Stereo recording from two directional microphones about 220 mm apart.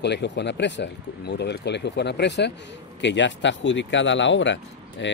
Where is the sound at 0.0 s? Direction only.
50° left (ahead or behind).